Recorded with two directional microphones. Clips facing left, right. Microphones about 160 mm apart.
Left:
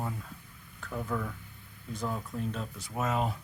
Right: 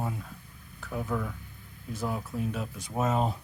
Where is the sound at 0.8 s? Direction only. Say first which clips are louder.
Right 2 dB; 10° right (ahead or behind).